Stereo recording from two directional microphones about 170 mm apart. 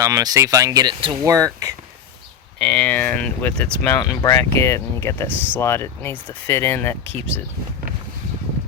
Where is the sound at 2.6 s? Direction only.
5° left (ahead or behind).